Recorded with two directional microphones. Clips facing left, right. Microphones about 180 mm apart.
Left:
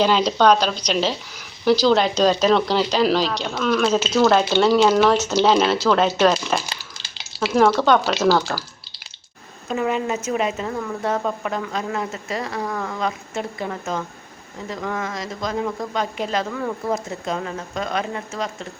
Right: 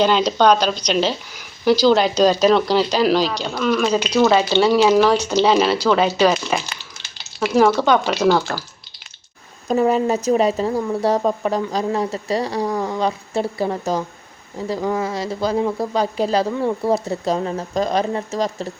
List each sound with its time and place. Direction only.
0.0 s speech: centre (ahead or behind)
9.6 s speech: 35° right (ahead or behind)